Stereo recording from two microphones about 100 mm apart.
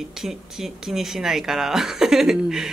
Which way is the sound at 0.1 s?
5° right (ahead or behind).